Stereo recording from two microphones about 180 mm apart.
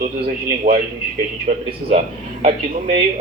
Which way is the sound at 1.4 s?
40° right (ahead or behind).